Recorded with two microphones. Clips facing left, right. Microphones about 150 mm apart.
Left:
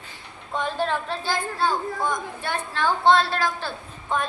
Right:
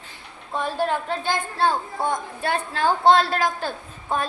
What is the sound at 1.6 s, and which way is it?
Speech, 30° right (ahead or behind).